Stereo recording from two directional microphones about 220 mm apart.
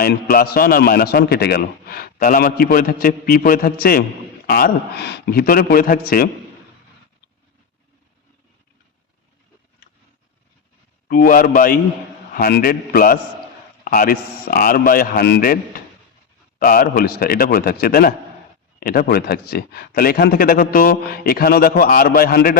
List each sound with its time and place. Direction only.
0.0 s a man's voice: 40° left (ahead or behind)
11.1 s a man's voice: 40° left (ahead or behind)